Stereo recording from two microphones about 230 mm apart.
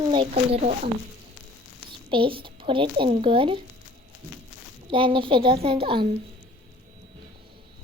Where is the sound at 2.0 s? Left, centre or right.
Right.